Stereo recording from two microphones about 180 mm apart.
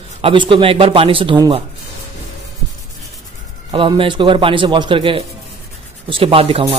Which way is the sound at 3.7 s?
30° right (ahead or behind).